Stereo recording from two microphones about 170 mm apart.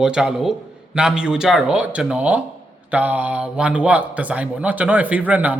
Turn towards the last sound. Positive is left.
turn(degrees=-10)  # may be behind; listen again after turning